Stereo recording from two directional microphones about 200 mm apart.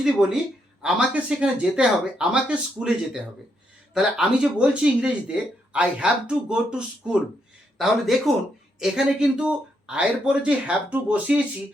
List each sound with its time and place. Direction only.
0.0 s speech: 5° right (ahead or behind)